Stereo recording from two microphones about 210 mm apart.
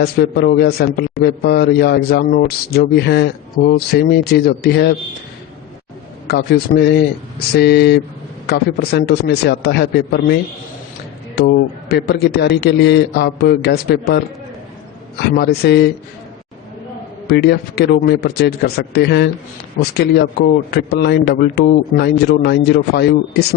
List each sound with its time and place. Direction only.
0.0 s a man's voice: 50° left (ahead or behind)
6.2 s a man's voice: 50° left (ahead or behind)
11.3 s a man's voice: 50° left (ahead or behind)
15.6 s a man's voice: 55° left (ahead or behind)
17.2 s a man's voice: 50° left (ahead or behind)
20.7 s a man's voice: 50° left (ahead or behind)